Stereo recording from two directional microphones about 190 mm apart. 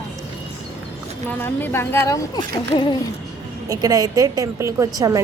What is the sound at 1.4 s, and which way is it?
A woman's voice, 10° left (ahead or behind).